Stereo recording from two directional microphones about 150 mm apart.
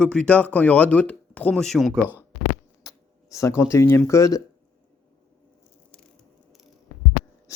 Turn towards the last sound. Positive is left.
turn(degrees=20)  # may be behind; listen again after turning